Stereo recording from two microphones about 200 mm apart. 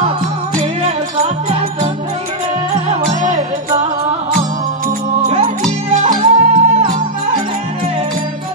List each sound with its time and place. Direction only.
0.8 s music: 30° right (ahead or behind)
2.9 s music: 35° right (ahead or behind)
6.2 s music: 40° right (ahead or behind)